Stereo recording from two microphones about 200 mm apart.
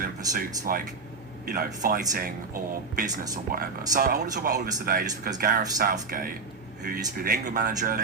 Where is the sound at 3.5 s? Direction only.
45° right (ahead or behind).